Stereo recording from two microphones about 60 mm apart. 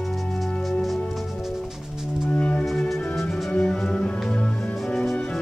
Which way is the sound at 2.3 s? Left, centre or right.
Left.